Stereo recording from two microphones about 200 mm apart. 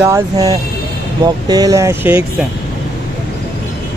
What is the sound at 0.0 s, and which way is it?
Speech, 15° right (ahead or behind).